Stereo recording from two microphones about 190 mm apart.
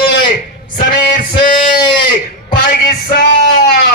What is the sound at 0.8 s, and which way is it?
Music, 45° left (ahead or behind).